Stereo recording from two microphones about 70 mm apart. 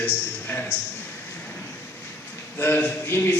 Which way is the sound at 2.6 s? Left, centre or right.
Left.